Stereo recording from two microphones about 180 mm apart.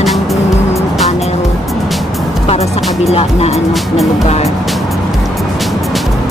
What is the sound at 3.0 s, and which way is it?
Speech, 35° left (ahead or behind).